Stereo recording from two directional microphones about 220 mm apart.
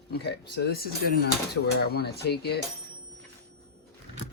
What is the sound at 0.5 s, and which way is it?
Speech, 45° left (ahead or behind).